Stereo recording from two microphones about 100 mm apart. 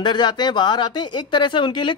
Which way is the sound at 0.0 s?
50° left (ahead or behind).